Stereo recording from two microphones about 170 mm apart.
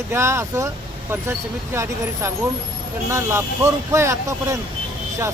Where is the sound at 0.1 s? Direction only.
15° right (ahead or behind).